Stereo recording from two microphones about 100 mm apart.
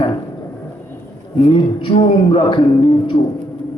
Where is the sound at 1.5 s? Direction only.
70° left (ahead or behind).